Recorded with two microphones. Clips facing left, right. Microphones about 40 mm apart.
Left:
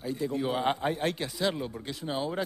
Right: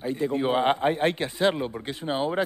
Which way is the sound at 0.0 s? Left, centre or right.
Right.